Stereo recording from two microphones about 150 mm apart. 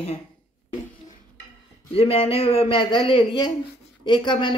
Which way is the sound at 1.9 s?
40° left (ahead or behind).